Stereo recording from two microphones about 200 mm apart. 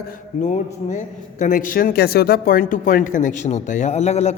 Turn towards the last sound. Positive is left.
turn(degrees=35)  # may be behind; listen again after turning